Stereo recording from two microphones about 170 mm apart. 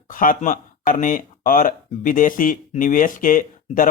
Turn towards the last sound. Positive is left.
turn(degrees=55)  # may be behind; listen again after turning